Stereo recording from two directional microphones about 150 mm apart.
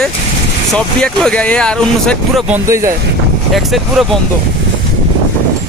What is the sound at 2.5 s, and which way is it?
Speech, 20° right (ahead or behind).